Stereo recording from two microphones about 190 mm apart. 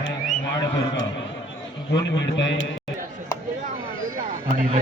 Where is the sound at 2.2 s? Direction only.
70° left (ahead or behind).